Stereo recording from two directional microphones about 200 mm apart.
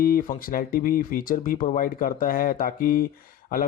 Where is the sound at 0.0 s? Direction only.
45° left (ahead or behind).